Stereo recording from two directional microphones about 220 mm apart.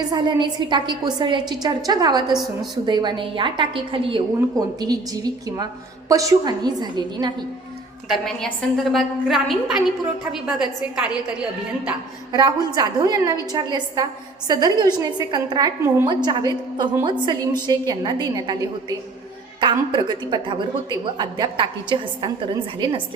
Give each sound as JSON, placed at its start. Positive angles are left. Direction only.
{"t": 0.1, "sound": "a woman's voice", "side_deg": -20}
{"t": 2.3, "sound": "a woman's voice", "side_deg": 0}
{"t": 2.8, "sound": "a woman's voice", "side_deg": -20}
{"t": 8.0, "sound": "a woman's voice", "side_deg": 0}
{"t": 12.3, "sound": "a woman's voice", "side_deg": -20}